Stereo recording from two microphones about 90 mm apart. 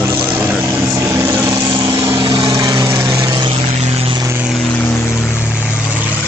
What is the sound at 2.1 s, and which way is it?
Vehicle, 65° right (ahead or behind).